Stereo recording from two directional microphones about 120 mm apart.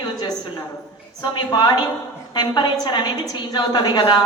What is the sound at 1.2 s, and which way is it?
A woman's voice, 35° left (ahead or behind).